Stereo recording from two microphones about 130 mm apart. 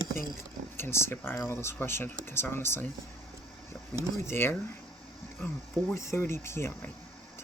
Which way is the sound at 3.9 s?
20° left (ahead or behind).